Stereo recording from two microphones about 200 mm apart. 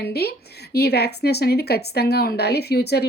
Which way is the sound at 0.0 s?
55° left (ahead or behind).